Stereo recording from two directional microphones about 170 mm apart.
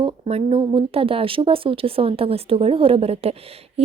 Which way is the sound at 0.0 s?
35° right (ahead or behind).